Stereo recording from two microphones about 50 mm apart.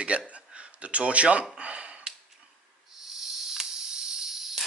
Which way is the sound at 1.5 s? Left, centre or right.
Right.